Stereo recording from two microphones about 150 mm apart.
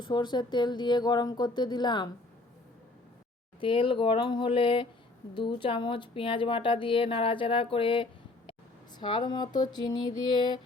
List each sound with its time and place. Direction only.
0.0 s speech: 30° left (ahead or behind)
3.6 s speech: 35° left (ahead or behind)